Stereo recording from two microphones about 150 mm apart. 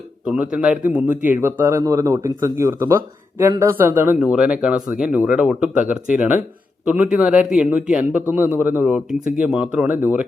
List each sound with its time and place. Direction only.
0.5 s a man's voice: 5° right (ahead or behind)
4.2 s a man's voice: 5° right (ahead or behind)